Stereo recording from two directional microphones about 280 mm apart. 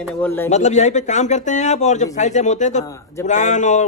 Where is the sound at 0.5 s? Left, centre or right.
Left.